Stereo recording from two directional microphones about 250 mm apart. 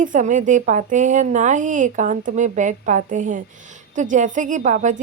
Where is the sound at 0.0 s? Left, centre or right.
Right.